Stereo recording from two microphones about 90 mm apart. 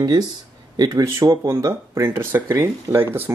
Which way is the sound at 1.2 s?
45° right (ahead or behind).